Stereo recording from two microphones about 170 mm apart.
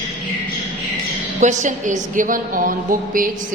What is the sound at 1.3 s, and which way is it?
A woman's voice, 45° right (ahead or behind).